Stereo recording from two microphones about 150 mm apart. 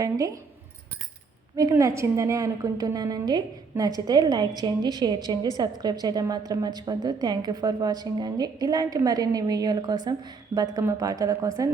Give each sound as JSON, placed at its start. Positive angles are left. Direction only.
{"t": 0.0, "sound": "a woman's voice", "side_deg": -20}
{"t": 1.5, "sound": "a woman's voice", "side_deg": -20}